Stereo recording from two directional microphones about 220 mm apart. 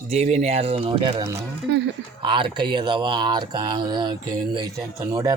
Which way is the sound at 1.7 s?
50° right (ahead or behind).